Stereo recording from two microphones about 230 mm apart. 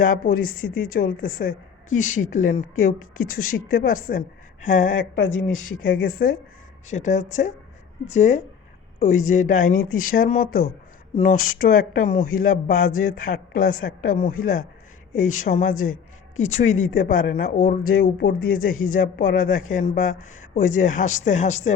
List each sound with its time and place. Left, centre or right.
0.0 s a woman's voice: left
3.0 s speech: left
3.7 s a woman's voice: left
11.1 s speech: left
11.6 s a woman's voice: left
15.7 s speech: left
16.4 s a woman's voice: left